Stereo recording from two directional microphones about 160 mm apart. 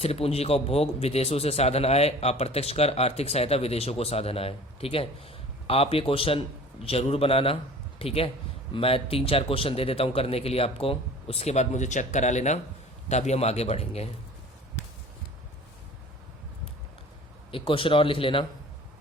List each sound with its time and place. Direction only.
0.0 s a man's voice: 40° left (ahead or behind)
17.5 s a man's voice: 35° left (ahead or behind)